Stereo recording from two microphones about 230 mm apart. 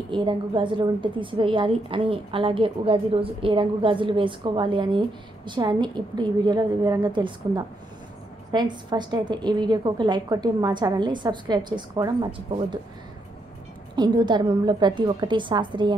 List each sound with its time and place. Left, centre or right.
0.1 s a woman's voice: right
13.9 s a woman's voice: centre